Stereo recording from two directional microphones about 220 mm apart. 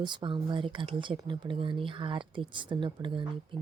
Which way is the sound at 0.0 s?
20° right (ahead or behind).